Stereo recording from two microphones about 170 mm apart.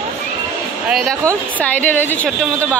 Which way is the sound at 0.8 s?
Centre (ahead or behind).